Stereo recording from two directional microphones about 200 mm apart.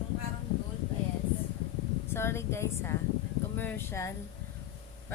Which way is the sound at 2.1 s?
10° left (ahead or behind).